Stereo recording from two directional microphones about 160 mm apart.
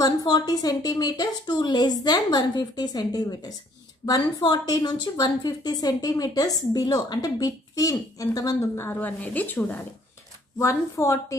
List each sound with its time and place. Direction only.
0.0 s a woman's voice: 25° left (ahead or behind)